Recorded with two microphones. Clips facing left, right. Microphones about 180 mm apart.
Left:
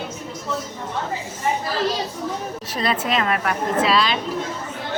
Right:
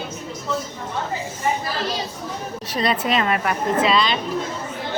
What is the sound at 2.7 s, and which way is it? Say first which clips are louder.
A woman's voice: right 2 dB; centre (ahead or behind).